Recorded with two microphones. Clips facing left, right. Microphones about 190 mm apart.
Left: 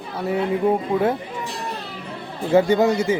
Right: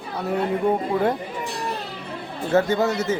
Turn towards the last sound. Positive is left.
turn(degrees=15)  # may be behind; listen again after turning